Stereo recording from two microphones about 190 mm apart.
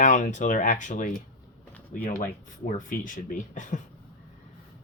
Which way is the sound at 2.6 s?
45° left (ahead or behind).